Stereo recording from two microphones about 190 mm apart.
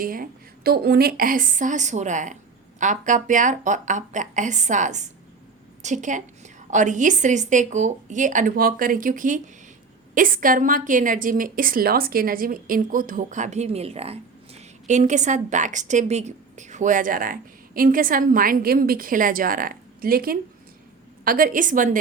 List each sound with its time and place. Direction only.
0.0 s a woman's voice: 50° right (ahead or behind)